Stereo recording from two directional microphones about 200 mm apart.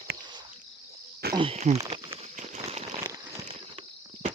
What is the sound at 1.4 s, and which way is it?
Speech, 30° right (ahead or behind).